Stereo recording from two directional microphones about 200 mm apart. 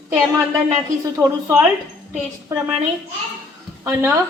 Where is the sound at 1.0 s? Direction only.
15° right (ahead or behind).